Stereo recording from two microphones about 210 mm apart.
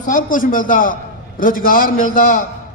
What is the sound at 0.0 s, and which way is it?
A man's voice, 40° left (ahead or behind).